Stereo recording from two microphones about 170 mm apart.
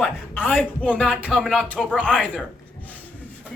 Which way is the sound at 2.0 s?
5° left (ahead or behind).